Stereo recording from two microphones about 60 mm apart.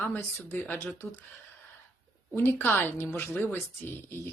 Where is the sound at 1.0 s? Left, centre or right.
Centre.